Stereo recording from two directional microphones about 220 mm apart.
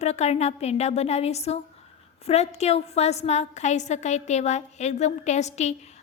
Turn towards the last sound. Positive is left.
turn(degrees=30)  # may be behind; listen again after turning